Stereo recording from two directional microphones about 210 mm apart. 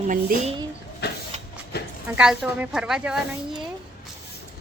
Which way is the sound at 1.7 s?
50° left (ahead or behind).